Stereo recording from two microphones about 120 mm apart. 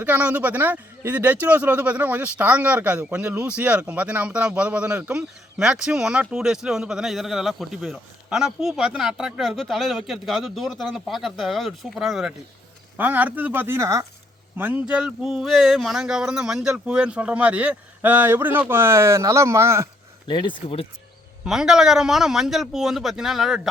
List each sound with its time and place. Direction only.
0.0 s speech: 15° right (ahead or behind)
13.0 s speech: 15° right (ahead or behind)
20.2 s speech: 40° left (ahead or behind)
21.4 s a man's voice: 5° right (ahead or behind)